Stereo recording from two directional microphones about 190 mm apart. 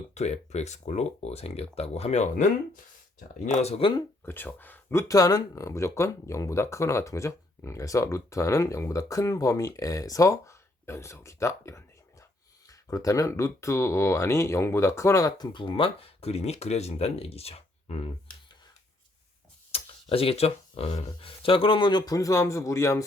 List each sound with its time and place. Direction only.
0.1 s speech: 35° left (ahead or behind)
4.3 s speech: 10° left (ahead or behind); by 18.1 s 30° left (ahead or behind)
19.7 s speech: 30° left (ahead or behind)